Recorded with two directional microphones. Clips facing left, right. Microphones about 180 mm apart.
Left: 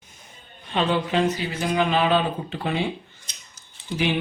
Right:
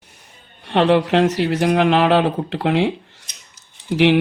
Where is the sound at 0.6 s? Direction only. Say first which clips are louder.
Right 8 dB; 70° right (ahead or behind).